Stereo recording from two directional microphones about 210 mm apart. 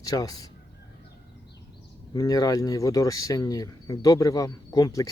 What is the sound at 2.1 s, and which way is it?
Speech, 15° left (ahead or behind).